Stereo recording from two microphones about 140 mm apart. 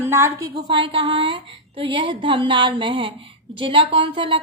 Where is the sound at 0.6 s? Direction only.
40° right (ahead or behind).